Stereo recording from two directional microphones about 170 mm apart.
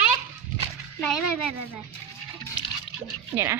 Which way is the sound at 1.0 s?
Centre (ahead or behind).